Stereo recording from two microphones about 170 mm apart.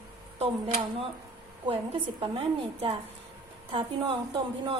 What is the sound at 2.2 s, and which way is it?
A woman's voice, 30° right (ahead or behind).